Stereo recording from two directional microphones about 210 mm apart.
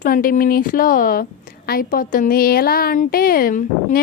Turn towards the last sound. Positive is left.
turn(degrees=40)  # may be behind; listen again after turning